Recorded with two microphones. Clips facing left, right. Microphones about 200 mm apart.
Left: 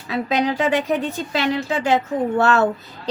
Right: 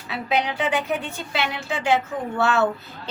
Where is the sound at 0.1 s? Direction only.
40° left (ahead or behind).